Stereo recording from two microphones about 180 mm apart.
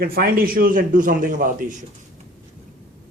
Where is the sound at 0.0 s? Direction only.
55° right (ahead or behind).